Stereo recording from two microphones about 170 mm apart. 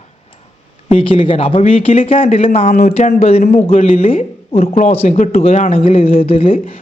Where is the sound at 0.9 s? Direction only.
35° left (ahead or behind).